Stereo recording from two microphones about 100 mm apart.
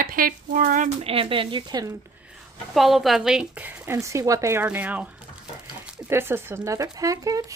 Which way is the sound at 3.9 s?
35° right (ahead or behind).